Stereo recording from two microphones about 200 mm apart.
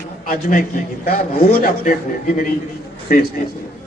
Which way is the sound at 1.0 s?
45° left (ahead or behind).